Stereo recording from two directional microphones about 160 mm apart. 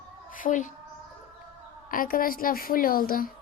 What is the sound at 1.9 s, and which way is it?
A woman's voice, 60° left (ahead or behind).